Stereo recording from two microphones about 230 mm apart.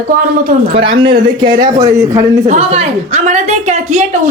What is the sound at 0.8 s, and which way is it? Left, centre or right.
A man's voice, right.